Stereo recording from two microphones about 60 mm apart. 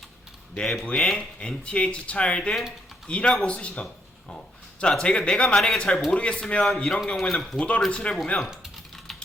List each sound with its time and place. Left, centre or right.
0.6 s speech: centre
7.9 s speech: centre
9.1 s typing: centre